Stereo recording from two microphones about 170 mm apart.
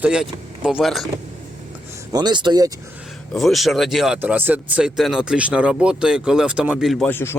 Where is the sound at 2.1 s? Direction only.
25° right (ahead or behind).